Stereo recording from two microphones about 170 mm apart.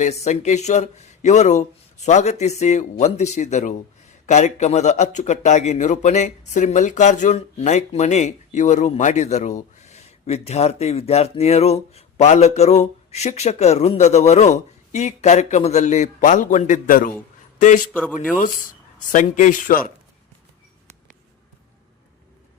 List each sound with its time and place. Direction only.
0.0 s speech: 40° left (ahead or behind)
18.3 s speech: 50° left (ahead or behind)